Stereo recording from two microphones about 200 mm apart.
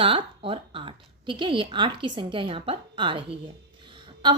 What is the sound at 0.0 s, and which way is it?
A woman's voice, 25° right (ahead or behind).